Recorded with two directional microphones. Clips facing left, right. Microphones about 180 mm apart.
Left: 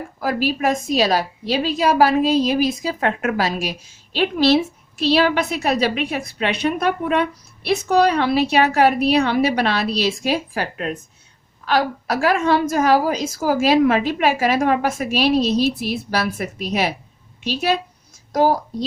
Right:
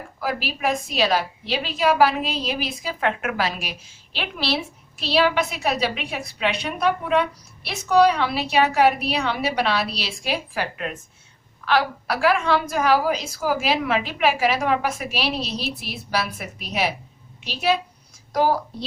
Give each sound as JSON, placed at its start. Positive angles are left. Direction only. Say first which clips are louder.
{"t": 0.2, "sound": "a woman's voice", "louder": "left 5 dB", "side_deg": 45}
{"t": 18.3, "sound": "a woman's voice", "louder": "left 3 dB", "side_deg": 40}